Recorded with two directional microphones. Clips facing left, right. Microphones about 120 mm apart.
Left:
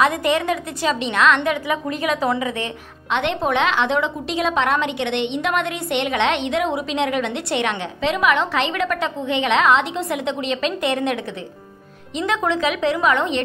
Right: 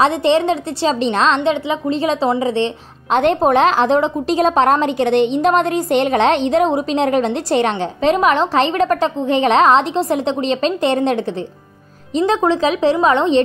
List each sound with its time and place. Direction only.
0.0 s a woman's voice: 30° right (ahead or behind)
12.2 s a woman's voice: 35° right (ahead or behind)